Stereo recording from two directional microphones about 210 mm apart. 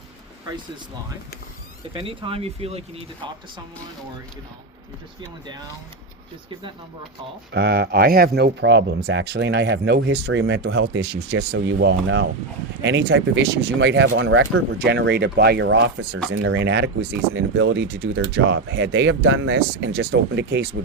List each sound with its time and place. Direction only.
1.9 s speech: 25° right (ahead or behind)
7.5 s speech: 50° right (ahead or behind)
16.3 s speech: 70° right (ahead or behind); by 20.7 s 50° right (ahead or behind)